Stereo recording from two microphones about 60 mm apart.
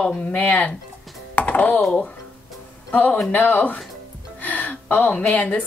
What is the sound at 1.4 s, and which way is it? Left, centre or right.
Computer keyboard, left.